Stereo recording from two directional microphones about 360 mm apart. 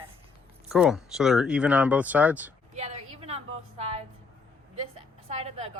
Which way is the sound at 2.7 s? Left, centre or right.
Centre.